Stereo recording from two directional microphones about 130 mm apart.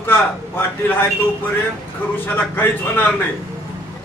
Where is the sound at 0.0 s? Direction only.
15° left (ahead or behind).